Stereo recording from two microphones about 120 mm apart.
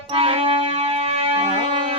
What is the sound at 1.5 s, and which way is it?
Music, 45° right (ahead or behind).